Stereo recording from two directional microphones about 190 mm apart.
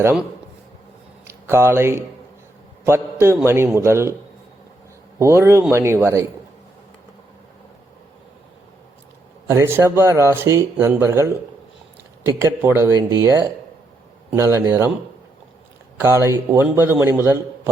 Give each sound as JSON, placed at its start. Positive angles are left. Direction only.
{"t": 0.0, "sound": "speech", "side_deg": -10}
{"t": 1.3, "sound": "speech", "side_deg": -15}
{"t": 5.2, "sound": "speech", "side_deg": -15}
{"t": 9.5, "sound": "speech", "side_deg": -15}
{"t": 16.0, "sound": "a man's voice", "side_deg": -15}